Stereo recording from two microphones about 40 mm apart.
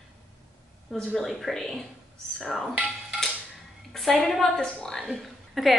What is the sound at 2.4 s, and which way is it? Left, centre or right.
Dishes, centre.